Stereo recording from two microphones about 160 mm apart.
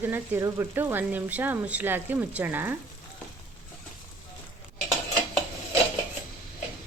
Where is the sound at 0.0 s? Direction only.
15° right (ahead or behind).